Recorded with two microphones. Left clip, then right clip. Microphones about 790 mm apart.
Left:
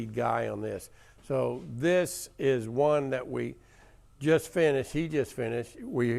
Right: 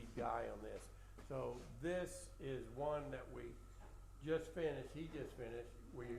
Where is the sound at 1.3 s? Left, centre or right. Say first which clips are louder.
Left 17 dB; left.